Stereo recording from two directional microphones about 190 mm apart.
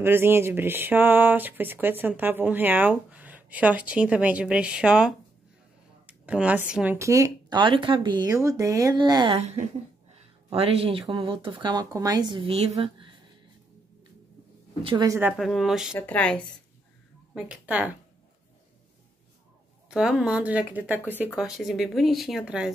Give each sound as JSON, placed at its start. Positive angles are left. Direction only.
{"t": 0.0, "sound": "speech", "side_deg": -10}
{"t": 6.0, "sound": "a sound", "side_deg": -5}
{"t": 6.7, "sound": "speech", "side_deg": -10}
{"t": 9.4, "sound": "speech", "side_deg": -35}
{"t": 14.8, "sound": "speech", "side_deg": -30}
{"t": 15.0, "sound": "speech", "side_deg": -10}
{"t": 17.3, "sound": "a woman's voice", "side_deg": -5}
{"t": 19.9, "sound": "speech", "side_deg": -5}